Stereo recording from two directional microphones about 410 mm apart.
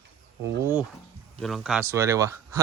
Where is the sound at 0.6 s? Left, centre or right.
Centre.